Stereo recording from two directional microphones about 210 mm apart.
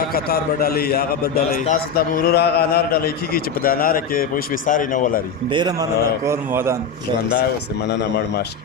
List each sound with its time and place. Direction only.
0.1 s a man's voice: 45° left (ahead or behind)
6.2 s a man's voice: 15° right (ahead or behind)